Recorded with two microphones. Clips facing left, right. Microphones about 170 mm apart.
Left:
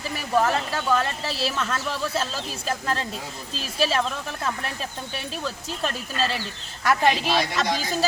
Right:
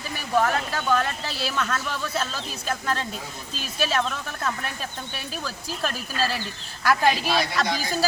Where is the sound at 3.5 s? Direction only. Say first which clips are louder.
Left 2 dB; 30° left (ahead or behind).